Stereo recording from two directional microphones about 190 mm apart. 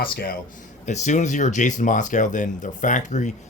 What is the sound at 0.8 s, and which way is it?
Speech, 40° left (ahead or behind).